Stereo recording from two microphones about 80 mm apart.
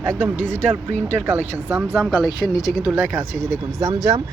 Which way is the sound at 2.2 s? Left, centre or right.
Left.